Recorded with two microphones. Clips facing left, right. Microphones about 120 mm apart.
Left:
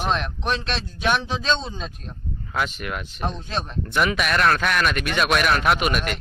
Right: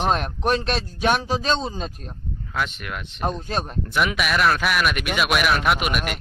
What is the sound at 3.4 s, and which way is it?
Speech, 45° right (ahead or behind).